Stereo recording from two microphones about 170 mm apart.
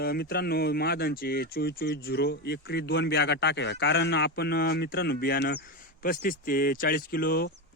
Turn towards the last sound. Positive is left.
turn(degrees=65)  # may be behind; listen again after turning